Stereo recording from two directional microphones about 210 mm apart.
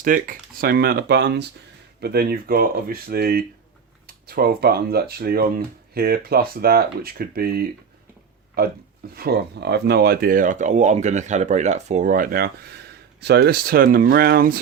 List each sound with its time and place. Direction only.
0.0 s speech: 40° right (ahead or behind)